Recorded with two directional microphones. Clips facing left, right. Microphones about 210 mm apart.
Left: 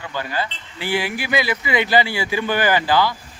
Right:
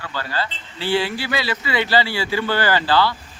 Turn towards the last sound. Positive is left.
turn(degrees=15)  # may be behind; listen again after turning